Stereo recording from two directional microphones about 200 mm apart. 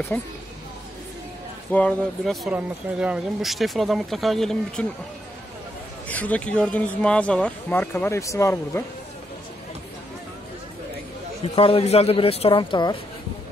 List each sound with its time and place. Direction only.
0.1 s speech: 10° left (ahead or behind)
1.7 s speech: 5° left (ahead or behind)
6.0 s speech: 5° left (ahead or behind)
11.4 s speech: 25° left (ahead or behind)